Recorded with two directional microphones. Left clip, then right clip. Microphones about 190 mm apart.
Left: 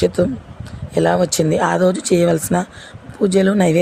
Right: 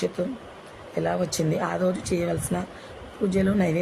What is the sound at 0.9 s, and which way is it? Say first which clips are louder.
Speech: left 11 dB; 40° left (ahead or behind).